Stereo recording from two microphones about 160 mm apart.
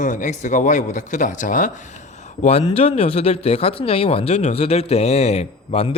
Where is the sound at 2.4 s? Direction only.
40° left (ahead or behind).